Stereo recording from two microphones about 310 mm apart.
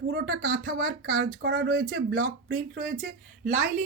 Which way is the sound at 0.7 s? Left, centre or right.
Right.